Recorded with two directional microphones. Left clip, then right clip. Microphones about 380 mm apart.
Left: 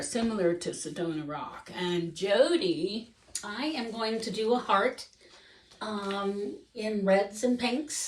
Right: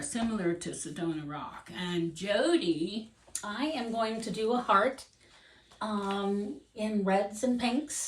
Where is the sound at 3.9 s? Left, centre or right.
Centre.